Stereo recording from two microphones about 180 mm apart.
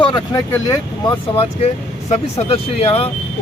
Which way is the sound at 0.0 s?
25° left (ahead or behind).